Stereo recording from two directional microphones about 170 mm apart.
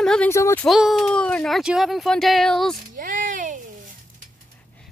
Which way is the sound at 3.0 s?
50° right (ahead or behind).